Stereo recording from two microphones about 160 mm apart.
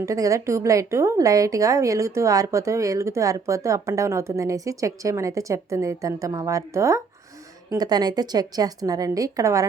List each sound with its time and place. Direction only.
0.0 s a woman's voice: 20° right (ahead or behind)